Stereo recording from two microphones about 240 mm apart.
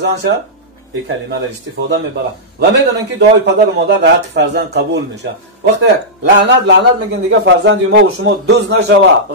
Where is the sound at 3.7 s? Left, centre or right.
Right.